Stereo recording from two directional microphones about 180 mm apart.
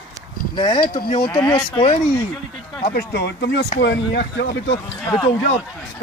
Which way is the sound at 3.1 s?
65° left (ahead or behind).